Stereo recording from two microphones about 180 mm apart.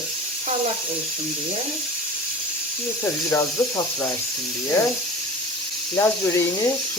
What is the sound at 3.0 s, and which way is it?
Speech, 15° left (ahead or behind).